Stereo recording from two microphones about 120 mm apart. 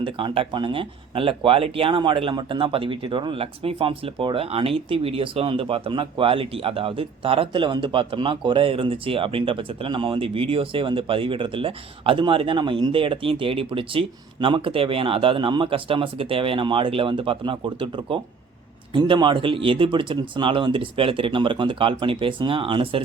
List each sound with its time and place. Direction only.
0.0 s speech: 45° right (ahead or behind)